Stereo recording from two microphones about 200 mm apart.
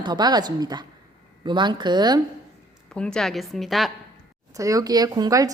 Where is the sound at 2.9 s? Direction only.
5° left (ahead or behind).